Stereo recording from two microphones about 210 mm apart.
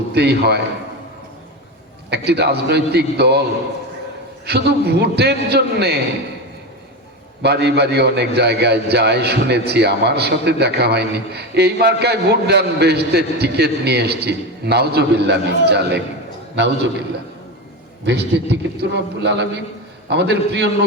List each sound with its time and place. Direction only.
0.1 s a man's voice: 50° right (ahead or behind)
2.0 s a man's voice: 50° right (ahead or behind)
4.4 s a man's voice: 50° right (ahead or behind)
7.4 s a man's voice: 50° right (ahead or behind)
18.0 s a man's voice: 55° right (ahead or behind)